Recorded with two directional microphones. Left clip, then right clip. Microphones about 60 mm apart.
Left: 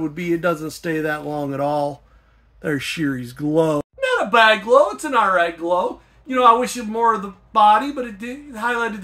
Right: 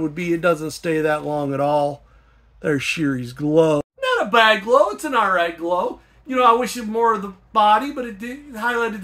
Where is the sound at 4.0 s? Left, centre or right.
Centre.